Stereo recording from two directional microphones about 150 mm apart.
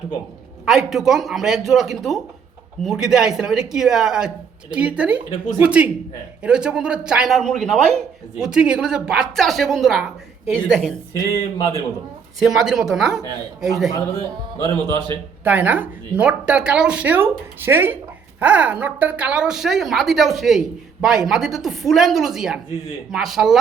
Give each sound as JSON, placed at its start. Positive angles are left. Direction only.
{"t": 0.6, "sound": "a woman's voice", "side_deg": -5}
{"t": 11.1, "sound": "speech", "side_deg": 25}
{"t": 12.6, "sound": "a woman's voice", "side_deg": -5}
{"t": 14.6, "sound": "speech", "side_deg": -30}
{"t": 15.4, "sound": "a woman's voice", "side_deg": -10}